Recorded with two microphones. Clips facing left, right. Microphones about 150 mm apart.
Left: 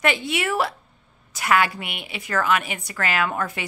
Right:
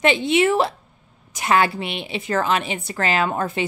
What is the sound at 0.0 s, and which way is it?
A woman's voice, 25° right (ahead or behind).